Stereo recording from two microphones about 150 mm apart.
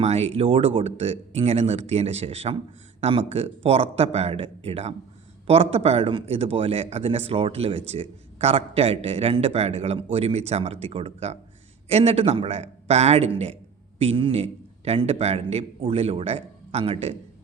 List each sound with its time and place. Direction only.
0.0 s speech: 45° right (ahead or behind)